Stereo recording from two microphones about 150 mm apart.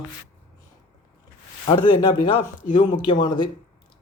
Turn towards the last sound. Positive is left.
turn(degrees=30)  # may be behind; listen again after turning